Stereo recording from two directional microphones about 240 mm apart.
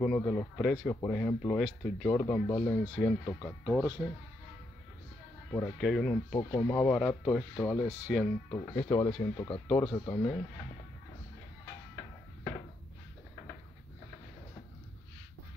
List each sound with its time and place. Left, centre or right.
0.0 s speech: centre
5.5 s speech: centre
8.5 s speech: centre